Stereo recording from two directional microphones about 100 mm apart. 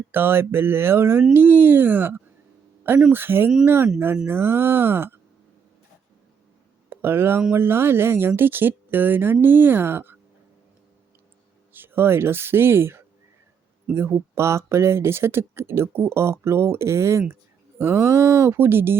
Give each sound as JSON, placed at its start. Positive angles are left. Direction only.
{"t": 0.1, "sound": "speech", "side_deg": -20}
{"t": 6.9, "sound": "speech", "side_deg": -25}
{"t": 11.7, "sound": "speech", "side_deg": -20}